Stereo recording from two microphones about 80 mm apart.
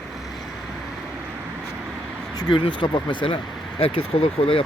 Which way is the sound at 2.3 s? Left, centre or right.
Left.